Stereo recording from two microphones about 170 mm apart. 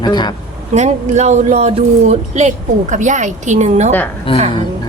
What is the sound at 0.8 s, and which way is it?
Speech, 45° right (ahead or behind).